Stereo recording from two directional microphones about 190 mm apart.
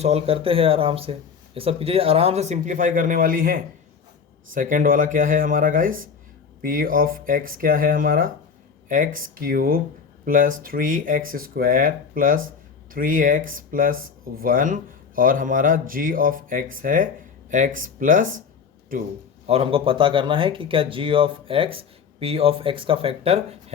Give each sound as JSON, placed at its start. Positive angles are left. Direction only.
{"t": 0.0, "sound": "a man's voice", "side_deg": -30}
{"t": 19.5, "sound": "speech", "side_deg": -30}